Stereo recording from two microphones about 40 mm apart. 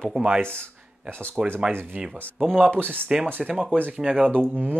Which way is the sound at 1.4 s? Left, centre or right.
Centre.